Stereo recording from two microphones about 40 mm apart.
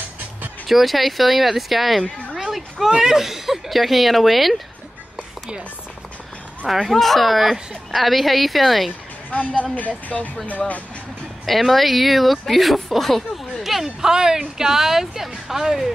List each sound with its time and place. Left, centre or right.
0.7 s speech: centre
2.3 s a sound: centre
3.0 s speech: centre
6.7 s speech: centre
9.8 s speech: left
11.4 s speech: centre
13.8 s speech: centre